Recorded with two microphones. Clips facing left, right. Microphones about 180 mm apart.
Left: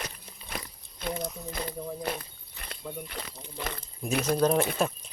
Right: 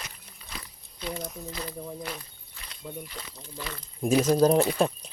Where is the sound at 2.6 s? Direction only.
55° left (ahead or behind).